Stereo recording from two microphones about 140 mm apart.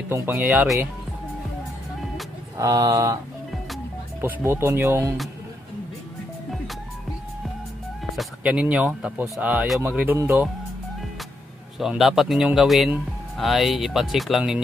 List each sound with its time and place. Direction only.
0.1 s speech: 15° right (ahead or behind)
2.5 s speech: 25° right (ahead or behind)
4.2 s speech: 15° right (ahead or behind)
8.2 s speech: 5° right (ahead or behind)
11.8 s speech: 5° right (ahead or behind)